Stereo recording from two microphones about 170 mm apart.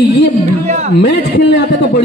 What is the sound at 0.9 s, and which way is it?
Speech, 90° left.